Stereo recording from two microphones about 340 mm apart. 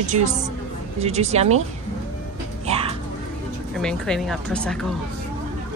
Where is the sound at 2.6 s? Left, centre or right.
Centre.